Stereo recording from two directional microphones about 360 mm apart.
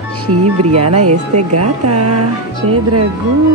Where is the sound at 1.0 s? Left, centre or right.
Right.